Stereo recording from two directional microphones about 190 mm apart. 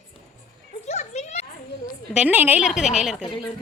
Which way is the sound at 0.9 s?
35° left (ahead or behind).